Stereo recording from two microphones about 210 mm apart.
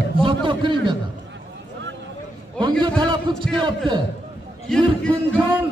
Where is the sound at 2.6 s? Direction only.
20° right (ahead or behind).